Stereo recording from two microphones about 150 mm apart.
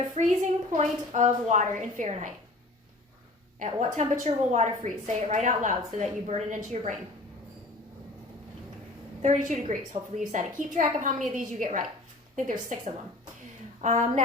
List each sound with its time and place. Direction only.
0.2 s a woman's voice: 55° right (ahead or behind)
3.6 s a woman's voice: 55° right (ahead or behind)
9.2 s a woman's voice: 55° right (ahead or behind)